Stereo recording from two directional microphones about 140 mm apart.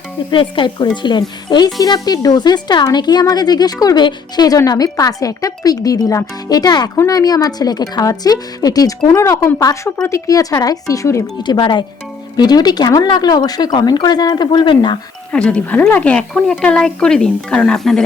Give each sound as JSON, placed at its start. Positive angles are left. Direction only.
{"t": 0.3, "sound": "music", "side_deg": 35}
{"t": 1.8, "sound": "speech", "side_deg": 25}
{"t": 11.5, "sound": "music", "side_deg": 35}
{"t": 12.4, "sound": "speech", "side_deg": 30}
{"t": 15.3, "sound": "a woman's voice", "side_deg": 5}